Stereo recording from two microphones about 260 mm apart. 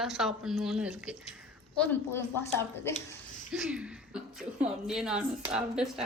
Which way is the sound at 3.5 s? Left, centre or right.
Centre.